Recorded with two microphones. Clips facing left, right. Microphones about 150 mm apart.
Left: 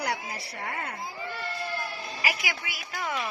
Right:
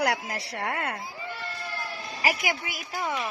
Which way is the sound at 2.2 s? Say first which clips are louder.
Right 5 dB; 45° right (ahead or behind).